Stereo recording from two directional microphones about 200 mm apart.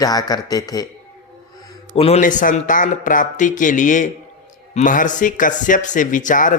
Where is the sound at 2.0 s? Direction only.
30° left (ahead or behind).